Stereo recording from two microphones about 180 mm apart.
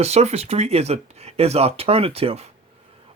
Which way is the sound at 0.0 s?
35° right (ahead or behind).